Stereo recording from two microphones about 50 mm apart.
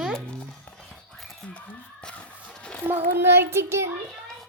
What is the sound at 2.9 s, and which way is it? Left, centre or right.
Child singing, right.